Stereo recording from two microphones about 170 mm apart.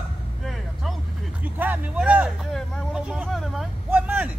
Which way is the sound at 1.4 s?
10° right (ahead or behind).